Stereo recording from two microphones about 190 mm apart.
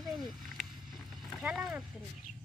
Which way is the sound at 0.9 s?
5° right (ahead or behind).